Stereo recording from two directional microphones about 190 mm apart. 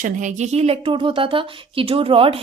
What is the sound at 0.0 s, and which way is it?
A woman's voice, 40° right (ahead or behind).